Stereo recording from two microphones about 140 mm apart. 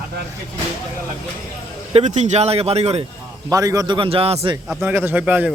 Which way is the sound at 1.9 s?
50° right (ahead or behind).